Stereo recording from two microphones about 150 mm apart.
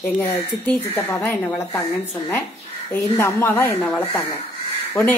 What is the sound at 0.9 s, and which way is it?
Speech, 15° left (ahead or behind).